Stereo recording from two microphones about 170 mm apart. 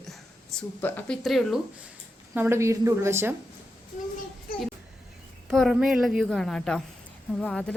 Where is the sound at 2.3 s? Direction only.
15° right (ahead or behind).